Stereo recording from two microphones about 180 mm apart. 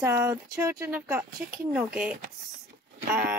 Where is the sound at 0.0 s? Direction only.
15° right (ahead or behind).